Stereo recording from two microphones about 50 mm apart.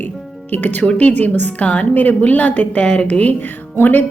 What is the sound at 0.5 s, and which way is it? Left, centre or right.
A woman's voice, left.